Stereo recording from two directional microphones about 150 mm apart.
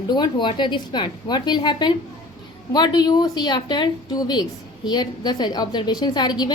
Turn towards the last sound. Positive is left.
turn(degrees=30)  # may be behind; listen again after turning